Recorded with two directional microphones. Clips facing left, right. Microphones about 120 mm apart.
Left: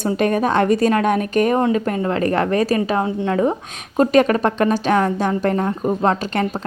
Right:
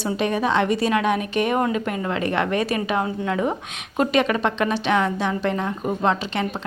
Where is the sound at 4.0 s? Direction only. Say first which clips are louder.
Left 5 dB; 40° left (ahead or behind).